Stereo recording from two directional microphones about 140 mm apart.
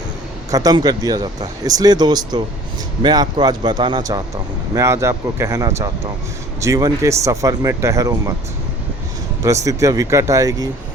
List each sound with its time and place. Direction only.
0.5 s speech: 25° right (ahead or behind)
9.4 s speech: 25° right (ahead or behind)